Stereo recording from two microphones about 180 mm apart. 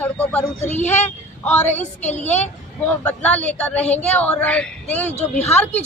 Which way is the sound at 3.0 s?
10° left (ahead or behind).